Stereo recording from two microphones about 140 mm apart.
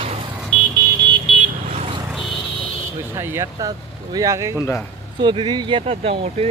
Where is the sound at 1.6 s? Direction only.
50° right (ahead or behind).